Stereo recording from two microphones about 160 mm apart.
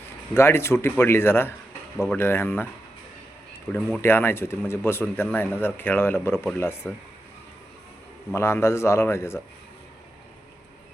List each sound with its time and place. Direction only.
0.3 s speech: 15° left (ahead or behind)
3.8 s speech: centre (ahead or behind)
4.0 s speech: 15° left (ahead or behind)
8.3 s speech: 15° left (ahead or behind)